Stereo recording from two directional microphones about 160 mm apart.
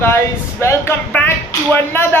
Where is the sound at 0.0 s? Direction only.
15° left (ahead or behind).